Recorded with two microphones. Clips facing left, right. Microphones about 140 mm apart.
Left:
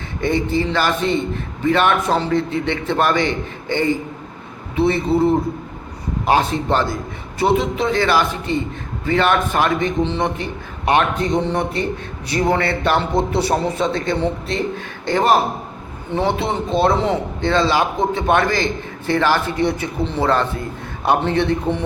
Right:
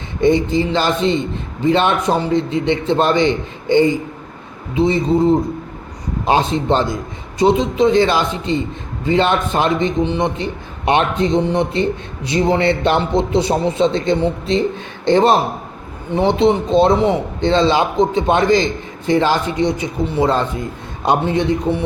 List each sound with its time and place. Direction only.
0.2 s a man's voice: 20° right (ahead or behind)